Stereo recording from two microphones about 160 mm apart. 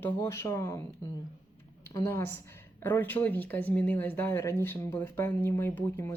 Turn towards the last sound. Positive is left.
turn(degrees=15)  # may be behind; listen again after turning